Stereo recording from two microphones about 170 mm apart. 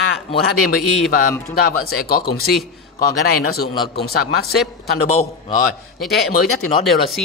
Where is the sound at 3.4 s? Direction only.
65° left (ahead or behind).